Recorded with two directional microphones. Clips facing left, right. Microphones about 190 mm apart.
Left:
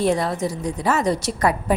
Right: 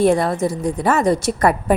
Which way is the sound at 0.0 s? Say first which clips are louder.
Right 5 dB; 55° right (ahead or behind).